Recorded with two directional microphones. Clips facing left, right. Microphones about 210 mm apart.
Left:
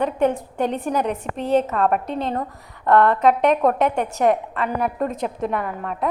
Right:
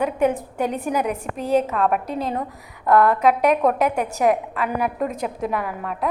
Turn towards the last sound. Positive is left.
turn(degrees=-5)  # may be behind; listen again after turning